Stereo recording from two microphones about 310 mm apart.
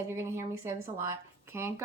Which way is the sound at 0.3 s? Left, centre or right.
Centre.